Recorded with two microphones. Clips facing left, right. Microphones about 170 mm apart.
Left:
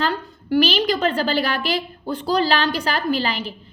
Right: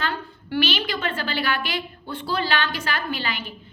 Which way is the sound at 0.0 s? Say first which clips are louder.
Left 5 dB; 40° left (ahead or behind).